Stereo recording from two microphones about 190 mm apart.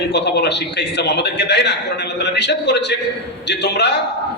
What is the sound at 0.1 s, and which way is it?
A man's voice, 65° left (ahead or behind).